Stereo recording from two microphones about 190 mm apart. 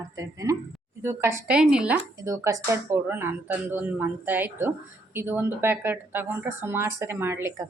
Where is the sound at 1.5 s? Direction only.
5° right (ahead or behind).